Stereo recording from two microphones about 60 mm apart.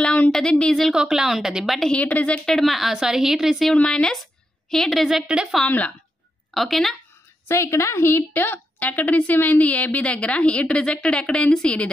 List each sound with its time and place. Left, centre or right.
0.5 s speech: centre
0.9 s a woman's voice: centre
1.9 s a woman's voice: left
2.4 s a woman's voice: centre
3.7 s a woman's voice: centre
7.4 s a woman's voice: left; by 11.9 s centre